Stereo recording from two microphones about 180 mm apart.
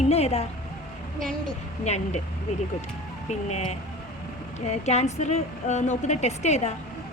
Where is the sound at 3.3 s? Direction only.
40° left (ahead or behind).